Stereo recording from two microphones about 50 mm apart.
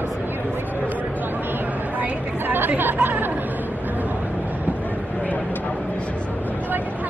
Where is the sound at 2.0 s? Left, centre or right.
Right.